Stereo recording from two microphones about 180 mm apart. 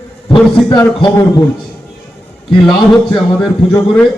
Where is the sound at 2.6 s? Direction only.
5° left (ahead or behind).